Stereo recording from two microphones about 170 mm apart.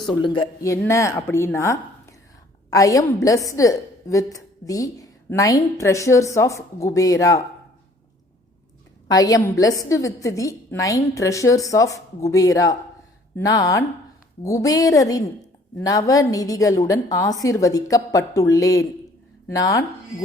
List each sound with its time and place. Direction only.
0.0 s a woman's voice: 25° left (ahead or behind)
9.0 s a woman's voice: 20° left (ahead or behind)